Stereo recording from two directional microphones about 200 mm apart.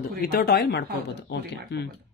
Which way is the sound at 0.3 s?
50° left (ahead or behind).